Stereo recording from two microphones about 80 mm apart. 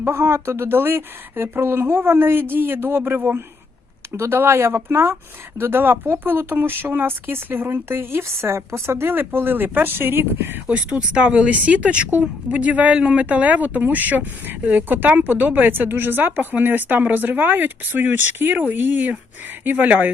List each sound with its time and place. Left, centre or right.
0.0 s speech: right
10.7 s speech: centre